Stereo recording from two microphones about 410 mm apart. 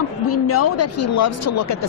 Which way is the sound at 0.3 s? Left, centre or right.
Left.